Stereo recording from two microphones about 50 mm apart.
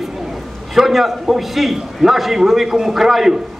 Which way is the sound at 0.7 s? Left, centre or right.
Centre.